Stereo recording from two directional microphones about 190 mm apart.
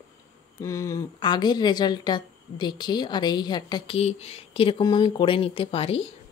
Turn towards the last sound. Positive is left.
turn(degrees=30)  # may be behind; listen again after turning